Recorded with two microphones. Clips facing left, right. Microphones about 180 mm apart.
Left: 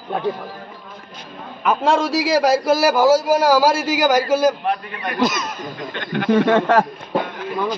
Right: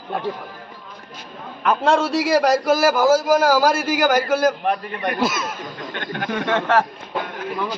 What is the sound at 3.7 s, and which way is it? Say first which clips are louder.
A man's voice: left 1 dB; 55° right (ahead or behind).